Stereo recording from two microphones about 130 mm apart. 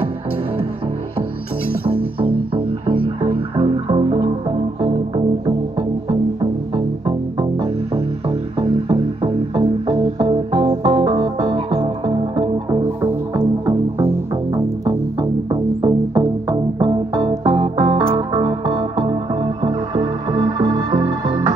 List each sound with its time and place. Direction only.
1.9 s music: 45° right (ahead or behind)
5.8 s music: 45° right (ahead or behind)
13.7 s music: 20° right (ahead or behind); by 21.5 s 40° right (ahead or behind)